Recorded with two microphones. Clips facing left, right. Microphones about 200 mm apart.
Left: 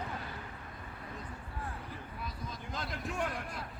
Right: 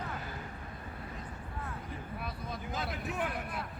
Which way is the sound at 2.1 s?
60° right (ahead or behind).